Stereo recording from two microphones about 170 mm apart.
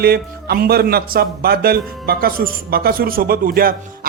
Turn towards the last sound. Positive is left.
turn(degrees=-60)  # may be behind; listen again after turning